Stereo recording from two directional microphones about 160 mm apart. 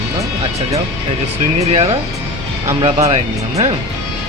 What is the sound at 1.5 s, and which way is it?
Speech, 40° right (ahead or behind).